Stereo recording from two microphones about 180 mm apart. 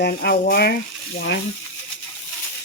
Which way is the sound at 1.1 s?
75° left (ahead or behind).